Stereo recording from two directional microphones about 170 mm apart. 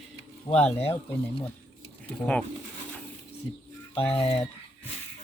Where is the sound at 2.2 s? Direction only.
5° left (ahead or behind).